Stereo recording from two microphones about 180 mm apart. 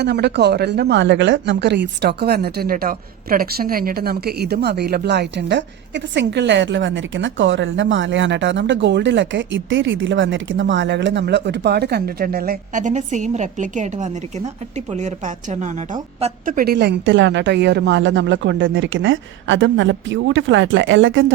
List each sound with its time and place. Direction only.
0.0 s speech: 70° right (ahead or behind); by 21.3 s 90° right